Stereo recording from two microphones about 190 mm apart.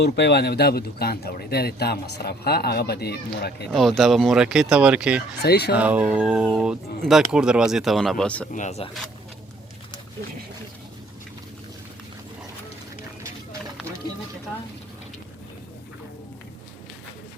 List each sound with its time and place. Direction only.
0.0 s speech: 60° left (ahead or behind)
3.7 s speech: centre (ahead or behind)
5.4 s speech: 60° left (ahead or behind)
5.7 s speech: 5° right (ahead or behind)
8.5 s speech: 35° left (ahead or behind)